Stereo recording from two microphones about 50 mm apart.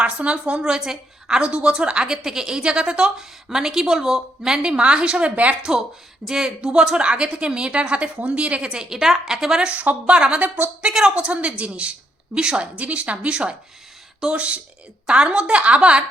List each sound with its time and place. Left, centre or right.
0.0 s a woman's voice: right
0.6 s a woman's voice: centre; by 5.5 s right
6.2 s a woman's voice: centre
9.8 s a woman's voice: right